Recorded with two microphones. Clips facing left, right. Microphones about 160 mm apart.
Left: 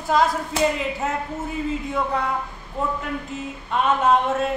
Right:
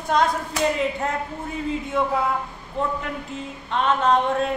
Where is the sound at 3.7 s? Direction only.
5° left (ahead or behind).